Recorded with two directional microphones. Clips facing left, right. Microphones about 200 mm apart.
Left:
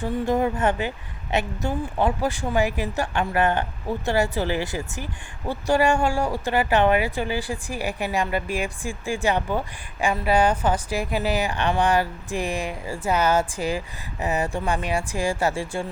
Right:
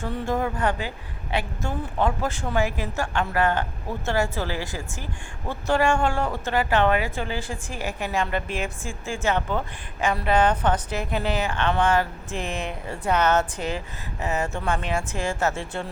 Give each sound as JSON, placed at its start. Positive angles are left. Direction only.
{"t": 0.0, "sound": "speech", "side_deg": 20}